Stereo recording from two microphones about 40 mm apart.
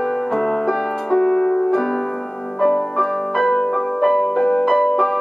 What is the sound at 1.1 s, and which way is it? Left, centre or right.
Music, centre.